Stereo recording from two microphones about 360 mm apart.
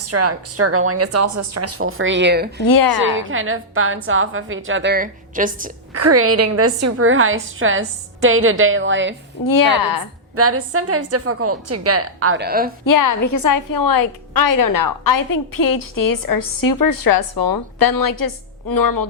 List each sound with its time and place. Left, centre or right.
0.0 s a woman's voice: right
2.6 s a woman's voice: left
3.2 s a woman's voice: right
5.9 s a woman's voice: right
9.5 s a woman's voice: left
10.3 s a woman's voice: right
12.8 s a woman's voice: left